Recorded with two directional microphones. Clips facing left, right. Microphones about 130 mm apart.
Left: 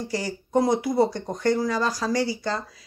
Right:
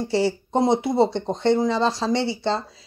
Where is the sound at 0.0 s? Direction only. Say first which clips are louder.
Right 7 dB; 25° right (ahead or behind).